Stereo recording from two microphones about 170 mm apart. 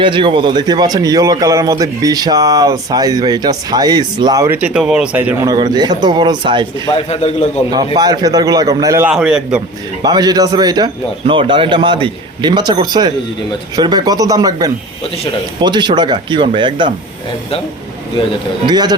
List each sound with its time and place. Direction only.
0.0 s speech: 30° right (ahead or behind); by 5.5 s 10° right (ahead or behind)
5.5 s speech: 25° right (ahead or behind)
6.9 s a man's voice: 40° left (ahead or behind)
7.9 s speech: 25° right (ahead or behind)
9.0 s a man's voice: 5° right (ahead or behind)
10.0 s speech: 25° right (ahead or behind)
18.6 s speech: 25° right (ahead or behind)